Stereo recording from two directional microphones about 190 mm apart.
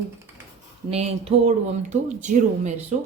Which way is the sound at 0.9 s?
35° right (ahead or behind).